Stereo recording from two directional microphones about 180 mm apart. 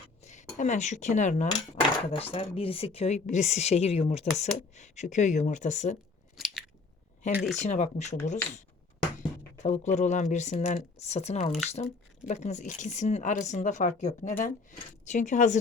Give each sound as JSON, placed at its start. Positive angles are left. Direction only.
{"t": 0.3, "sound": "speech", "side_deg": 40}
{"t": 6.3, "sound": "chewing", "side_deg": 0}
{"t": 7.2, "sound": "speech", "side_deg": 40}